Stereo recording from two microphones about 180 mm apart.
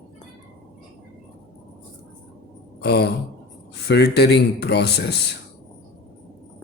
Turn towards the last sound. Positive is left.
turn(degrees=65)  # may be behind; listen again after turning